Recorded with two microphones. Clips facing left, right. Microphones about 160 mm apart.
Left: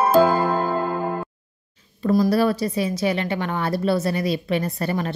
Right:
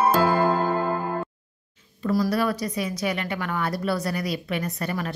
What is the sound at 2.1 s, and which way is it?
Speech, 25° left (ahead or behind).